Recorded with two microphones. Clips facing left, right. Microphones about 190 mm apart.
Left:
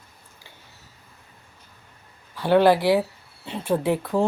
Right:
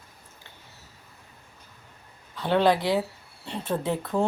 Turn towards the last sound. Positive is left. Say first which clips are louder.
# left 3 dB
turn(degrees=0)  # may be behind; listen again after turning